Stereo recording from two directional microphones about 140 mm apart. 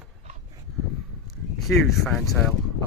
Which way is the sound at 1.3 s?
Centre (ahead or behind).